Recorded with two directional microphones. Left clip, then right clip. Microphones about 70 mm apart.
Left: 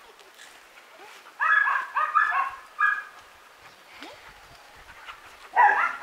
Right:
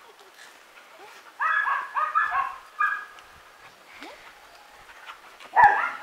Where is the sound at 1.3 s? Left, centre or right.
Left.